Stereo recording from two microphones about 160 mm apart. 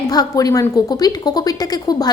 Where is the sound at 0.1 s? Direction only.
25° left (ahead or behind).